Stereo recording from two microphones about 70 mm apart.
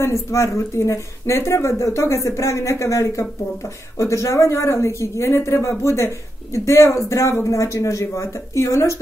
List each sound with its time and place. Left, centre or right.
0.0 s speech: left